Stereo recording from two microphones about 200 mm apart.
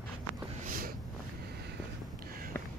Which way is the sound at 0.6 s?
45° right (ahead or behind).